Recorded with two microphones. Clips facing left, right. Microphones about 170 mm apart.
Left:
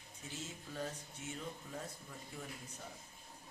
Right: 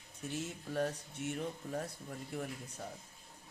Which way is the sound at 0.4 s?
65° right (ahead or behind).